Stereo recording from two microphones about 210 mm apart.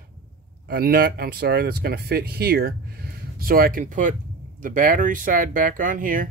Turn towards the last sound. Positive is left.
turn(degrees=-40)  # may be behind; listen again after turning